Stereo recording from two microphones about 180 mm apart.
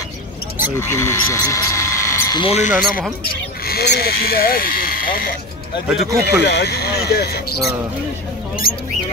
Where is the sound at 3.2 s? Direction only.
60° left (ahead or behind).